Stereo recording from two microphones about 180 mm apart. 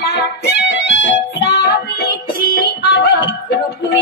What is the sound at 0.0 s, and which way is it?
Music, 65° left (ahead or behind).